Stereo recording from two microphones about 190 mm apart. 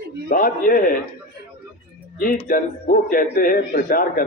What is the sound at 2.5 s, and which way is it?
A man's voice, 45° left (ahead or behind).